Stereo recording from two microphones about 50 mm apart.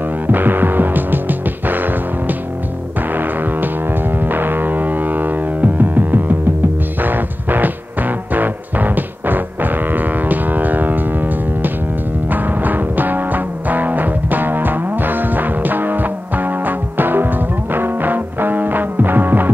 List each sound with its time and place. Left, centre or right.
0.3 s music: right